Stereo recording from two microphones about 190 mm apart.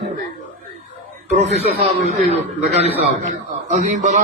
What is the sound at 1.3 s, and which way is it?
Speech, 35° right (ahead or behind).